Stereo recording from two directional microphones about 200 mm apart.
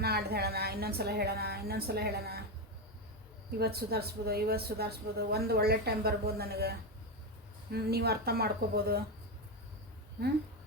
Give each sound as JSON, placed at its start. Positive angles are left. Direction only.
{"t": 0.0, "sound": "a woman's voice", "side_deg": -50}
{"t": 3.6, "sound": "a woman's voice", "side_deg": -50}